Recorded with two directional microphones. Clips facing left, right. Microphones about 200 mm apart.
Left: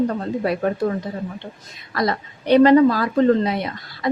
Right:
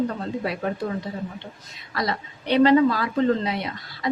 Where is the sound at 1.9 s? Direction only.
50° left (ahead or behind).